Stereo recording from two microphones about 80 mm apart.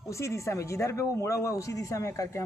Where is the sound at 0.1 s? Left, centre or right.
Left.